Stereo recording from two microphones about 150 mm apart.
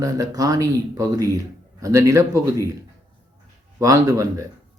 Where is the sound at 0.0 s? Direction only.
20° right (ahead or behind).